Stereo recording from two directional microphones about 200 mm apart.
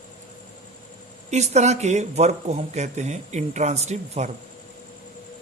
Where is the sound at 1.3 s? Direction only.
35° right (ahead or behind).